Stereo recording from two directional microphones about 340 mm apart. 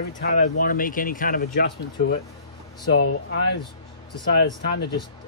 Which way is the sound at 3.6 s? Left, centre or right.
Centre.